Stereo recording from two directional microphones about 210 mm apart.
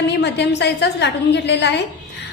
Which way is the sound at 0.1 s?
55° left (ahead or behind).